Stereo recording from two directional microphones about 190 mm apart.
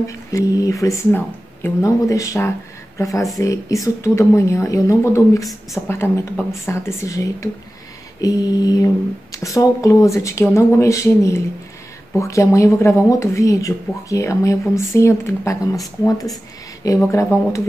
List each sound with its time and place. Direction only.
0.0 s speech: 15° left (ahead or behind)
16.8 s speech: 15° left (ahead or behind)